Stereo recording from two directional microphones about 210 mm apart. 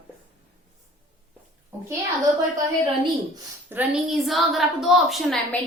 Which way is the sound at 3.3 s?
10° right (ahead or behind).